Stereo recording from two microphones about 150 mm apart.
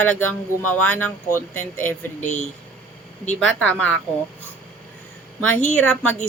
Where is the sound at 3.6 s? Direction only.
10° left (ahead or behind).